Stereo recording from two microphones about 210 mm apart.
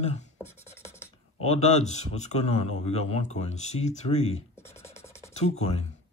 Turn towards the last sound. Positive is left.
turn(degrees=30)  # may be behind; listen again after turning